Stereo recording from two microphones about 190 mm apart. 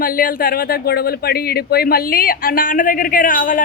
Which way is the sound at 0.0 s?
50° left (ahead or behind).